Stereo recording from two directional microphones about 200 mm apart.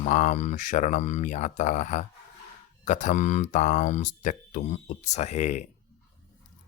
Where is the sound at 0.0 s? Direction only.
35° left (ahead or behind).